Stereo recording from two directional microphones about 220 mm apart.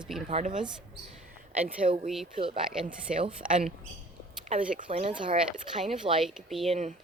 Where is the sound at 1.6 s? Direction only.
30° right (ahead or behind).